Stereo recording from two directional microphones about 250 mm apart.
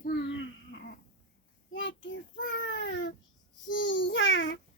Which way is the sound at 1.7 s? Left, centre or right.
Left.